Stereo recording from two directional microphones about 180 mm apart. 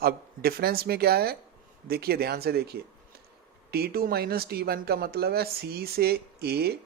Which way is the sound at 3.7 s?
60° right (ahead or behind).